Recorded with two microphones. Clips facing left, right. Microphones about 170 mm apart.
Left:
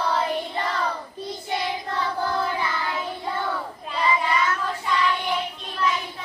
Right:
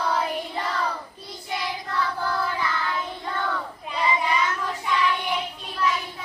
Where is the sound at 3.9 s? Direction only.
15° right (ahead or behind).